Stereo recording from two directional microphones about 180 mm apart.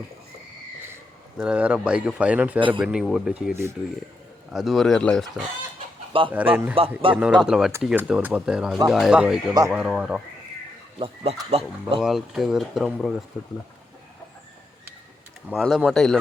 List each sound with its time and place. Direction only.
1.4 s speech: 5° right (ahead or behind)
2.6 s speech: 30° right (ahead or behind)
2.8 s speech: centre (ahead or behind)
4.5 s speech: centre (ahead or behind)
6.3 s speech: 10° right (ahead or behind)
6.7 s speech: 30° right (ahead or behind)
7.2 s speech: 5° right (ahead or behind)
11.0 s speech: 35° right (ahead or behind)
11.9 s speech: centre (ahead or behind)
15.4 s speech: centre (ahead or behind)